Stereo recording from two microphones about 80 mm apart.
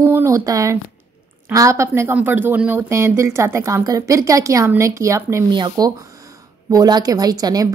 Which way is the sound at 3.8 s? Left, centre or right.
Right.